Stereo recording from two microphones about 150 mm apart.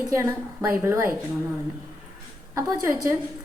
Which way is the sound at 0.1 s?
20° right (ahead or behind).